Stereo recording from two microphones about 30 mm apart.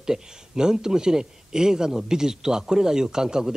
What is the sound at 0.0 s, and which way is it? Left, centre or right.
A man's voice, right.